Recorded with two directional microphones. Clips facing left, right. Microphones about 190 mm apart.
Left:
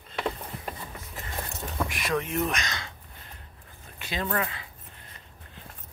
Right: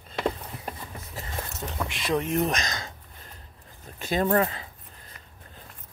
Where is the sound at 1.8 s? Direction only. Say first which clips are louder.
Right 5 dB; 25° right (ahead or behind).